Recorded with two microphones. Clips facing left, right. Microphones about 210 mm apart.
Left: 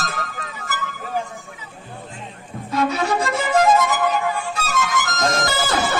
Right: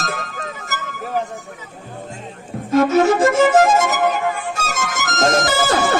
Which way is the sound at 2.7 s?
45° right (ahead or behind).